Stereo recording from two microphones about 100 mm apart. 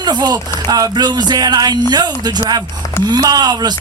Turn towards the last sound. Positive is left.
turn(degrees=-45)  # may be behind; listen again after turning